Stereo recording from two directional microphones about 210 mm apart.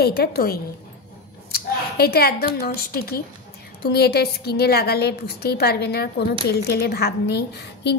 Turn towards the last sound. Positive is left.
turn(degrees=55)  # may be behind; listen again after turning